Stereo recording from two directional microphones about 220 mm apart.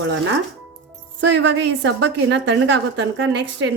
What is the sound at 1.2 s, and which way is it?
A woman's voice, 55° right (ahead or behind).